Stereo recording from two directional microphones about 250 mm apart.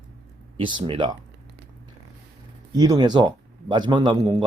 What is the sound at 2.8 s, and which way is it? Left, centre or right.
Speech, centre.